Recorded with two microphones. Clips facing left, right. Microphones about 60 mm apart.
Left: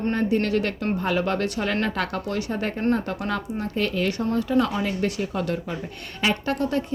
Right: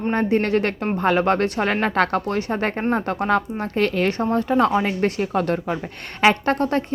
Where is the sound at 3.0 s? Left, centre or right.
Right.